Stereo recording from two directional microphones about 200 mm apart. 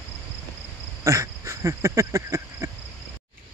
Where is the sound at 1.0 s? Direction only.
15° right (ahead or behind).